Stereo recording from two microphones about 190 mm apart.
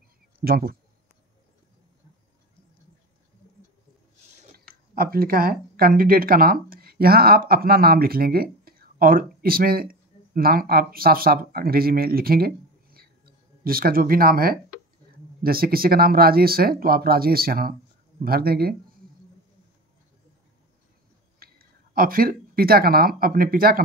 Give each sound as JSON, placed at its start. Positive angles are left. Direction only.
{"t": 0.4, "sound": "speech", "side_deg": -55}
{"t": 4.9, "sound": "speech", "side_deg": -50}
{"t": 21.4, "sound": "speech", "side_deg": -50}